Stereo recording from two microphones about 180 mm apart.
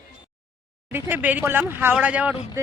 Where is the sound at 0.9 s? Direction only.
10° right (ahead or behind).